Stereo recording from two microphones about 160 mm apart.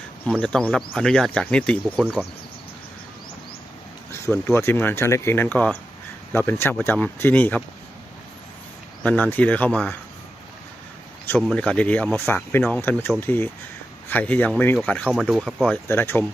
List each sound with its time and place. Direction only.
0.3 s speech: 5° left (ahead or behind)
4.1 s speech: 15° left (ahead or behind)
9.0 s speech: 10° left (ahead or behind)
11.4 s speech: 5° left (ahead or behind)
15.0 s speech: 5° right (ahead or behind)
15.9 s speech: 15° left (ahead or behind)